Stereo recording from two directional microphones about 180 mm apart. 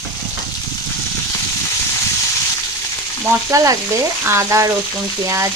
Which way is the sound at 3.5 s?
15° right (ahead or behind).